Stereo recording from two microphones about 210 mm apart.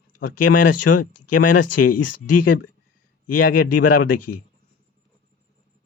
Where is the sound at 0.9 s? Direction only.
90° left.